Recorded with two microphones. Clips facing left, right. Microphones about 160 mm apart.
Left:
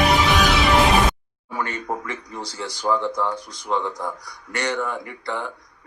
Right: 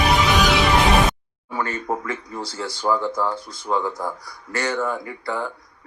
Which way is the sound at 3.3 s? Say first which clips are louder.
Right 1 dB; 15° left (ahead or behind).